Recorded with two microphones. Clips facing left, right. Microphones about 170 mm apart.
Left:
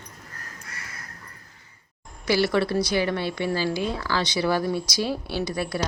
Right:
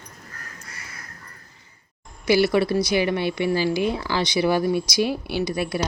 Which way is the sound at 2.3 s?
10° right (ahead or behind).